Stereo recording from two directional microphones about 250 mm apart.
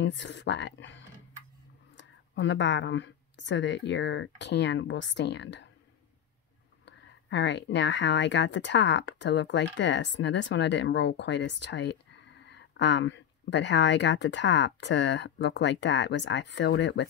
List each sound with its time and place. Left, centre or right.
0.0 s speech: left
6.9 s speech: left